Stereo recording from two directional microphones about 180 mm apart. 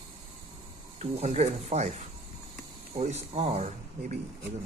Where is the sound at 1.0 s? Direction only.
40° right (ahead or behind).